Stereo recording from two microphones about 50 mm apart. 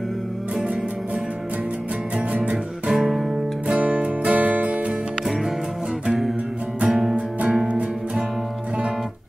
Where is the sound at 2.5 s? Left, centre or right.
Centre.